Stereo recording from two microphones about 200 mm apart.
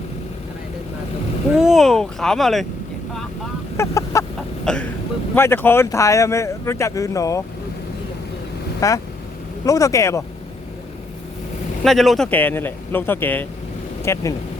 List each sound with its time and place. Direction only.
1.5 s speech: centre (ahead or behind)
3.8 s speech: 15° left (ahead or behind)
4.6 s throat clearing: 5° left (ahead or behind)
5.3 s speech: 10° left (ahead or behind)
8.8 s speech: 15° left (ahead or behind)
11.8 s speech: centre (ahead or behind)